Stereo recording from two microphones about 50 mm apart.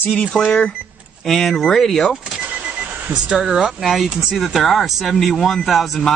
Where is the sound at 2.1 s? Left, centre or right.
Centre.